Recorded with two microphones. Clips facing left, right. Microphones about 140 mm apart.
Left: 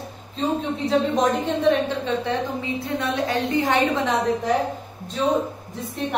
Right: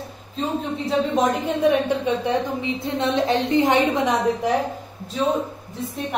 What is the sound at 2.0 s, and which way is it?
A woman's voice, 15° right (ahead or behind).